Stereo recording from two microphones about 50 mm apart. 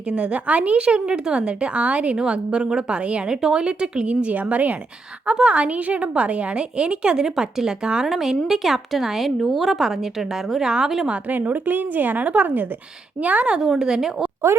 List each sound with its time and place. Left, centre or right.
0.1 s a woman's voice: right
11.3 s a woman's voice: right
13.2 s a woman's voice: right
13.6 s a woman's voice: centre